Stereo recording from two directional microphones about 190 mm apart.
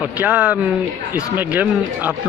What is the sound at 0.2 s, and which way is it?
A man's voice, 5° right (ahead or behind).